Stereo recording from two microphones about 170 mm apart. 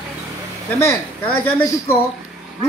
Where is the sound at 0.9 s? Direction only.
15° left (ahead or behind).